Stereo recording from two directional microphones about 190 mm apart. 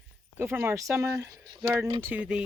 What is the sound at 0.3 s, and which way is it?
Speech, 10° right (ahead or behind).